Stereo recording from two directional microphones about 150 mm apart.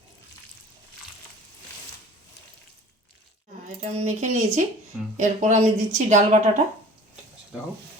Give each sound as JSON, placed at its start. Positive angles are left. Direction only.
{"t": 3.8, "sound": "a woman's voice", "side_deg": -45}